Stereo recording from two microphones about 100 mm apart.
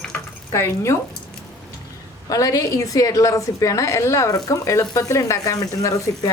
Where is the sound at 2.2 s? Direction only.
35° left (ahead or behind).